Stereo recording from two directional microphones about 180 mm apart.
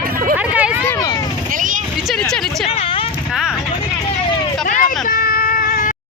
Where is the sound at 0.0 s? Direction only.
55° right (ahead or behind).